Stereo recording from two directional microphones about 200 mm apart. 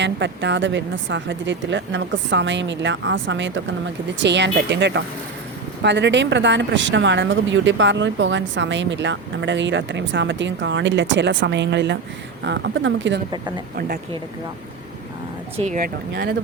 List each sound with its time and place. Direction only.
0.0 s speech: 65° right (ahead or behind)
13.7 s speech: 50° right (ahead or behind)
15.5 s speech: 35° right (ahead or behind)
16.1 s speech: 55° right (ahead or behind)